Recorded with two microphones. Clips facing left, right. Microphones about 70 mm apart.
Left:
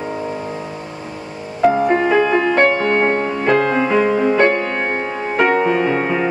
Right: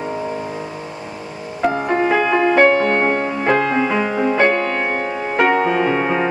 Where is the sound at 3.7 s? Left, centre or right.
Centre.